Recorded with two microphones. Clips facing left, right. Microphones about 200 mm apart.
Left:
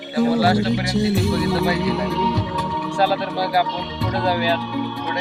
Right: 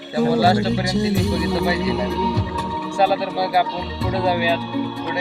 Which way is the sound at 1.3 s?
20° right (ahead or behind).